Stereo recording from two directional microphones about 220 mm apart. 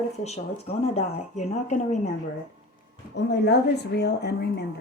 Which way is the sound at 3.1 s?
50° left (ahead or behind).